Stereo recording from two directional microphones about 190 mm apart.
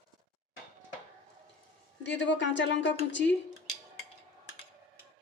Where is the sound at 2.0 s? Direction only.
70° left (ahead or behind).